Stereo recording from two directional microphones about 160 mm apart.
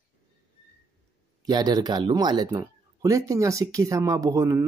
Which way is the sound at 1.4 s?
25° right (ahead or behind).